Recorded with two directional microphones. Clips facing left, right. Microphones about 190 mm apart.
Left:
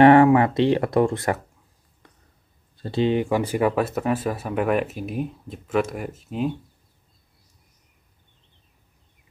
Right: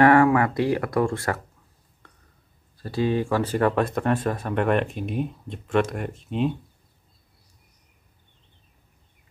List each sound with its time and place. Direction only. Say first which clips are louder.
0.0 s speech: left 3 dB; 25° left (ahead or behind)
2.8 s speech: left 2 dB; 25° left (ahead or behind); by 6.5 s 5° left (ahead or behind)